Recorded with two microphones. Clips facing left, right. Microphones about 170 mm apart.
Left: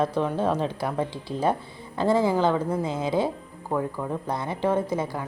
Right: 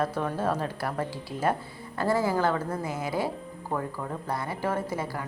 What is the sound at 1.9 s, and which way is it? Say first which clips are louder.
Speech: left 4 dB; 20° left (ahead or behind).